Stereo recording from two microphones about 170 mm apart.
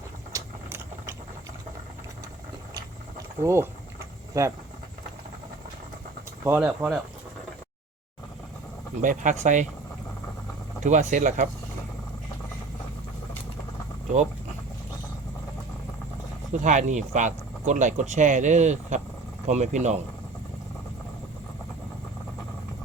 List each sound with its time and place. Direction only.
0.3 s vehicle: 15° right (ahead or behind)
3.4 s speech: 15° right (ahead or behind)
6.4 s speech: 10° right (ahead or behind)
9.0 s speech: 45° right (ahead or behind)
10.8 s speech: 45° right (ahead or behind)
16.5 s speech: 45° right (ahead or behind)